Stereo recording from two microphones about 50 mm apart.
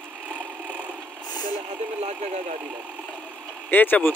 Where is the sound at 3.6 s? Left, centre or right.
Left.